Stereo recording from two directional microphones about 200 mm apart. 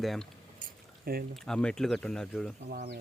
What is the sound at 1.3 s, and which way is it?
Speech, 5° left (ahead or behind).